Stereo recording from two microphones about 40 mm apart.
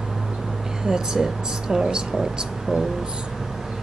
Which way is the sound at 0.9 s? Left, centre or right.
Centre.